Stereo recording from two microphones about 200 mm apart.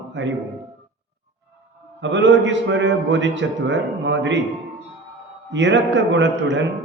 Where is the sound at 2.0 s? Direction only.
65° right (ahead or behind).